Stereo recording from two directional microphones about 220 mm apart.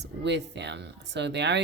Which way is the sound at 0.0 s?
50° right (ahead or behind).